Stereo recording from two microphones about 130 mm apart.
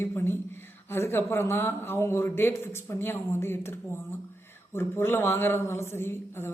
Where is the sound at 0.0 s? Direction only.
20° left (ahead or behind).